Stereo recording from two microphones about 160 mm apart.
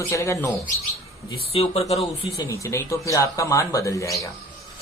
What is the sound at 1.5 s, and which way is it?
Speech, 40° left (ahead or behind).